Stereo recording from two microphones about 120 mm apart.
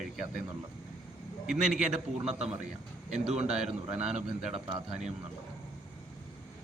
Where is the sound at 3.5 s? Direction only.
5° right (ahead or behind).